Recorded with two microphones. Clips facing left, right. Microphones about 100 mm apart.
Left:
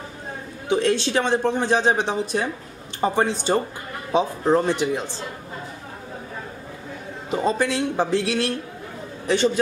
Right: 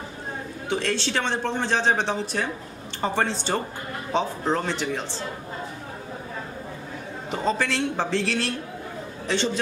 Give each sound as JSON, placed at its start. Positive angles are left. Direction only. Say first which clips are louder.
{"t": 0.7, "sound": "speech", "louder": "left 6 dB", "side_deg": 15}
{"t": 7.2, "sound": "a man's voice", "louder": "left 3 dB", "side_deg": 15}